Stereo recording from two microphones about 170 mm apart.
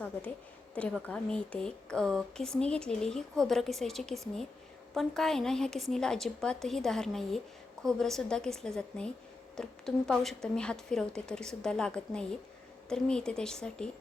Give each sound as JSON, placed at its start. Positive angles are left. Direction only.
{"t": 0.8, "sound": "a woman's voice", "side_deg": 5}